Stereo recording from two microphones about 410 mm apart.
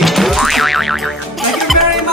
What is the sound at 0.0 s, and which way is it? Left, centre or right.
Music, centre.